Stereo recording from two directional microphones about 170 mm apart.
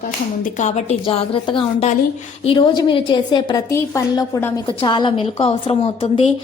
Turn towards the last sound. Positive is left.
turn(degrees=35)  # may be behind; listen again after turning